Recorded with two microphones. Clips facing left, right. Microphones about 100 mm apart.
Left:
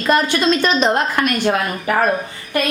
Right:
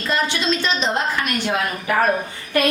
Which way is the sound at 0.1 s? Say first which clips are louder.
Left 6 dB; 50° left (ahead or behind).